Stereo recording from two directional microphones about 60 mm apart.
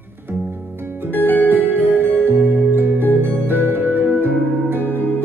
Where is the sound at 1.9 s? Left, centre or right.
Right.